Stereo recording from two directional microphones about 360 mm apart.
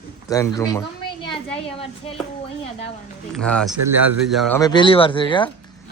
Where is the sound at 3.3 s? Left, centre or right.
Centre.